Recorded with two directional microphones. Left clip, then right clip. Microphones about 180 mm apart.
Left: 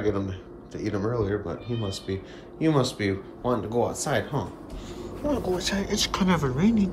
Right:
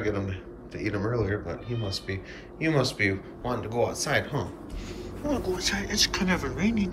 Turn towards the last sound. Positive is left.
turn(degrees=20)  # may be behind; listen again after turning